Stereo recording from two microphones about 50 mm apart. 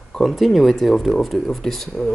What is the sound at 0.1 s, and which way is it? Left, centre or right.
Speech, centre.